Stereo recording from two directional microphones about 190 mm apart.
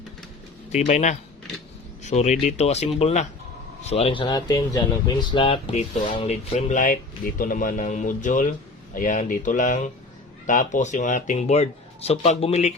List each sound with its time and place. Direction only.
0.7 s speech: 40° left (ahead or behind)